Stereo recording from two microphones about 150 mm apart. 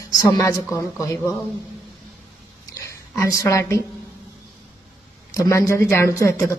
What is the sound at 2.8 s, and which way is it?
Speech, 20° left (ahead or behind).